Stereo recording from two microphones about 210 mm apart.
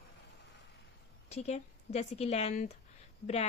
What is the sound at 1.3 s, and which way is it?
A woman's voice, 30° left (ahead or behind).